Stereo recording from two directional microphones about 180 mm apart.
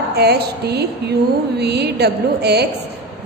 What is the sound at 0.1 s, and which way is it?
A woman's voice, 65° right (ahead or behind).